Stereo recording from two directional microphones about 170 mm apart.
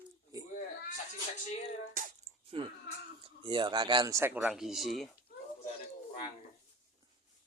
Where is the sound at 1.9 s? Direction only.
50° right (ahead or behind).